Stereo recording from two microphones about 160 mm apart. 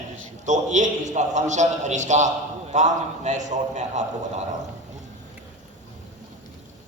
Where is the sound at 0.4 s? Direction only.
50° right (ahead or behind).